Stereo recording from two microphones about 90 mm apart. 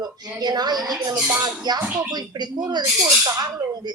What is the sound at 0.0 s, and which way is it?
A woman's voice, 50° right (ahead or behind).